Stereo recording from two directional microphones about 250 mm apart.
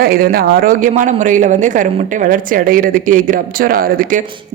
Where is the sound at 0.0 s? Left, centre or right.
Right.